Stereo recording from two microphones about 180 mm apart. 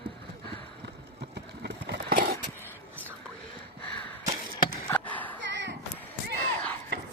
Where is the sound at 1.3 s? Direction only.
70° right (ahead or behind).